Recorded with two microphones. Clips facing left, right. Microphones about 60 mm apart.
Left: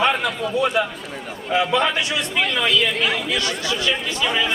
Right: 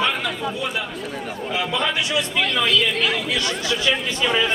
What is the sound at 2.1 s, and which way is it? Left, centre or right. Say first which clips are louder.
Speech: even; centre.